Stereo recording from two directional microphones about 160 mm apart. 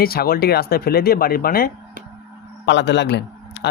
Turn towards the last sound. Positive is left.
turn(degrees=90)